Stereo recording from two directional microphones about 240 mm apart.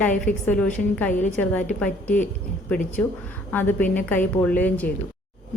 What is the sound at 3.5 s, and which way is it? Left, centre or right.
Speech, centre.